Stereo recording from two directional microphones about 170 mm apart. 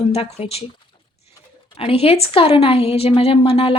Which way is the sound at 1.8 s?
35° left (ahead or behind).